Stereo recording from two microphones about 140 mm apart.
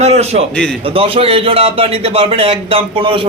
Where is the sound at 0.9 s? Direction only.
40° right (ahead or behind).